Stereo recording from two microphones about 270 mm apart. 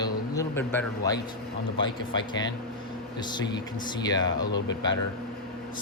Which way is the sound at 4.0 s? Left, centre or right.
Centre.